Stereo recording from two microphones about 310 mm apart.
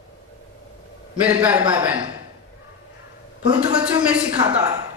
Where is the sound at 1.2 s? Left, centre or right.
Centre.